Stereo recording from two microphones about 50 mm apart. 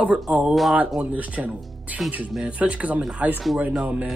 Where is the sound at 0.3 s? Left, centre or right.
Right.